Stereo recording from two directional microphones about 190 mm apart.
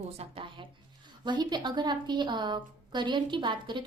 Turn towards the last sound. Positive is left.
turn(degrees=-25)  # may be behind; listen again after turning